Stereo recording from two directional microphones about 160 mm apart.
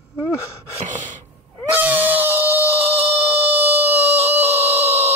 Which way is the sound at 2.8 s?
40° right (ahead or behind).